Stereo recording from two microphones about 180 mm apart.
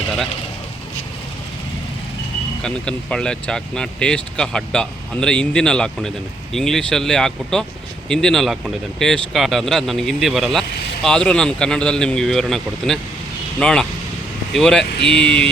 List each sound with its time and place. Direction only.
2.6 s speech: 5° left (ahead or behind)